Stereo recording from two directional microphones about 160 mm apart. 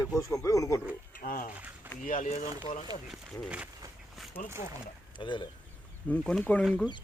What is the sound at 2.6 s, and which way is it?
Speech, 40° left (ahead or behind).